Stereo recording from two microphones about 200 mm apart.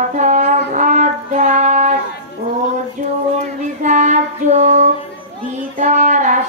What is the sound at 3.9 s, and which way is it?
Child singing, 35° right (ahead or behind).